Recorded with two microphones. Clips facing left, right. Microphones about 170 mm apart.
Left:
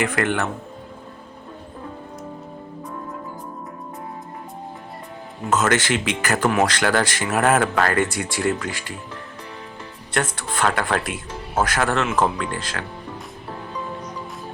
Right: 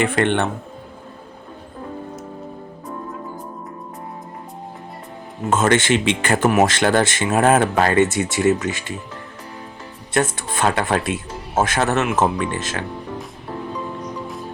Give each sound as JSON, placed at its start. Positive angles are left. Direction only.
{"t": 0.0, "sound": "speech", "side_deg": -25}
{"t": 5.5, "sound": "speech", "side_deg": -25}
{"t": 10.2, "sound": "speech", "side_deg": -20}